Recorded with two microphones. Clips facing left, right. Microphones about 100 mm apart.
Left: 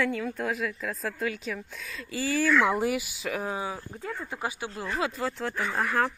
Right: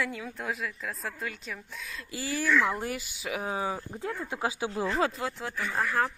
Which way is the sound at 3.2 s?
10° right (ahead or behind).